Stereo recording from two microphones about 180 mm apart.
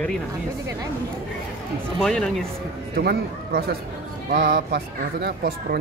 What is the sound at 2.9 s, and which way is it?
Speech, 60° right (ahead or behind).